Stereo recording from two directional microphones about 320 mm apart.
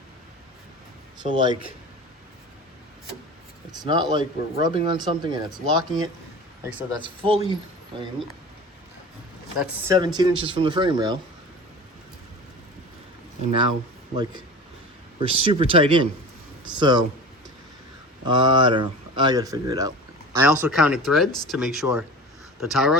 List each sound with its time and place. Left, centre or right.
1.2 s speech: centre
3.7 s speech: centre
9.6 s speech: centre
15.2 s speech: centre
18.3 s speech: centre